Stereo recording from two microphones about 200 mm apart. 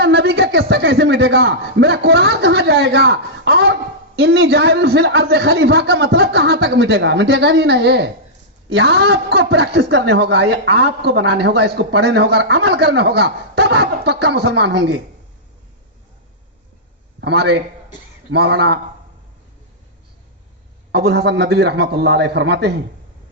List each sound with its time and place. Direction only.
0.0 s a man's voice: 55° right (ahead or behind)
17.2 s a man's voice: 55° right (ahead or behind)
20.9 s a man's voice: 55° right (ahead or behind)